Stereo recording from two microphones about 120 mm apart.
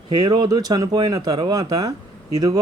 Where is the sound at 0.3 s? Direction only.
35° right (ahead or behind).